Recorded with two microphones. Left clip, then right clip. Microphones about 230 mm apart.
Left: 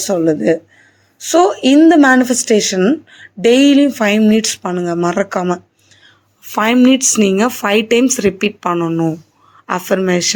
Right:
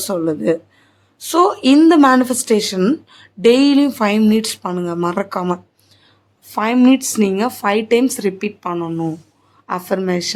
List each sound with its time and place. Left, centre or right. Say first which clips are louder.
0.0 s speech: left 5 dB; centre